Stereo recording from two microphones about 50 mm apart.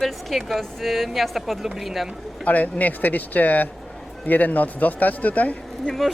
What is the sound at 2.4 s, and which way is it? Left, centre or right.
Speech, left.